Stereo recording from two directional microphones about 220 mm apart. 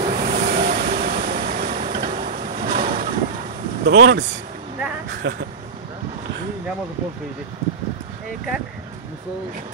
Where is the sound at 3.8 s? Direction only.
50° right (ahead or behind).